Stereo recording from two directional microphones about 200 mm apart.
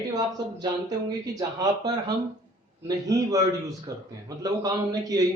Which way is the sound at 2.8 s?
20° right (ahead or behind).